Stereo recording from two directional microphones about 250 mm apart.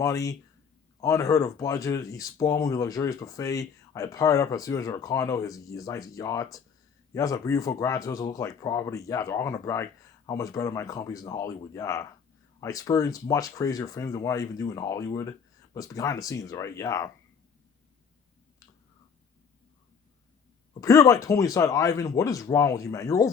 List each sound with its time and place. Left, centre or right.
0.0 s speech: centre
20.8 s speech: centre